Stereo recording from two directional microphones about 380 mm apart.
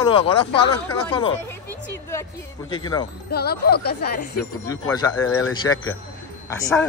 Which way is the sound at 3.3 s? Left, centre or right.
Left.